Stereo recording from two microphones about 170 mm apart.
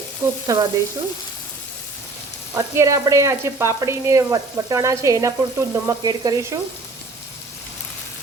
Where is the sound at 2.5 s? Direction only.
15° right (ahead or behind).